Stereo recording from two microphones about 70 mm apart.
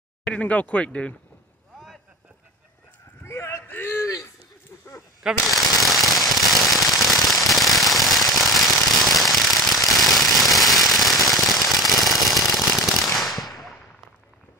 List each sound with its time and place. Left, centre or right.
0.2 s speech: centre
3.3 s a sound: left
5.2 s firecracker: centre